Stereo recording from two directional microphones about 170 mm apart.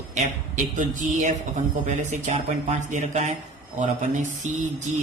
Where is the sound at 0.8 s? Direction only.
45° right (ahead or behind).